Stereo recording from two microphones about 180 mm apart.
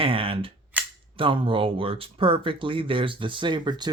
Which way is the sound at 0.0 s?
30° right (ahead or behind).